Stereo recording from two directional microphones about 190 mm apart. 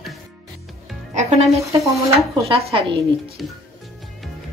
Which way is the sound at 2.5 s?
30° right (ahead or behind).